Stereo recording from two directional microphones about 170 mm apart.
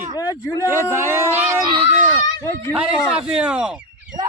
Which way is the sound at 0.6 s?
15° right (ahead or behind).